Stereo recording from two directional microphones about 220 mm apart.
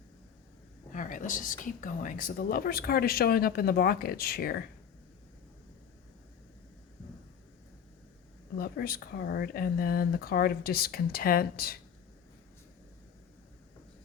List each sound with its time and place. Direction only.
0.9 s speech: 35° left (ahead or behind)
8.5 s speech: 45° left (ahead or behind)